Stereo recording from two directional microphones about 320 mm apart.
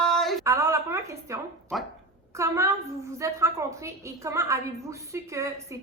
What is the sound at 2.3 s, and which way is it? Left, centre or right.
A woman's voice, centre.